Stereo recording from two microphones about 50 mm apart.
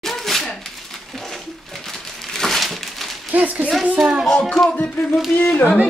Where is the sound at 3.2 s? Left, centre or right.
Right.